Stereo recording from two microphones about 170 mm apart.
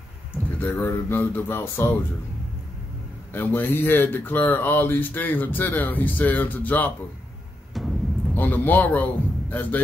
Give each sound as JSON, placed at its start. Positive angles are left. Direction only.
{"t": 0.6, "sound": "speech", "side_deg": 15}
{"t": 3.3, "sound": "speech", "side_deg": 10}
{"t": 7.7, "sound": "a sound", "side_deg": 0}
{"t": 8.4, "sound": "a man's voice", "side_deg": 10}